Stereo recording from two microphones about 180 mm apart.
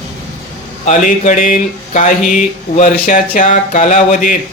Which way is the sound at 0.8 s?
45° left (ahead or behind).